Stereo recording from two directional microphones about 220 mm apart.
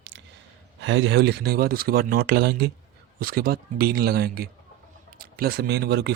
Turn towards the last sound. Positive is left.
turn(degrees=-50)  # may be behind; listen again after turning